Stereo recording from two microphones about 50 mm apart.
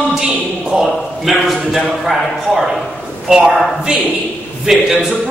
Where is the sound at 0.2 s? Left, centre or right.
Centre.